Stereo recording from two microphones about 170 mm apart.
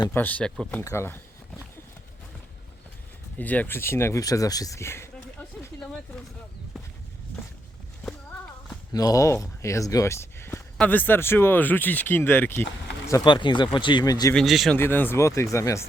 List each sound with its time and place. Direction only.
0.1 s speech: 10° left (ahead or behind)
0.8 s a sound: 15° left (ahead or behind)
3.3 s speech: 10° left (ahead or behind)
8.0 s a sound: centre (ahead or behind)
8.9 s speech: 20° left (ahead or behind)
13.1 s speech: 25° left (ahead or behind)
14.3 s speech: centre (ahead or behind)
14.8 s speech: 10° left (ahead or behind)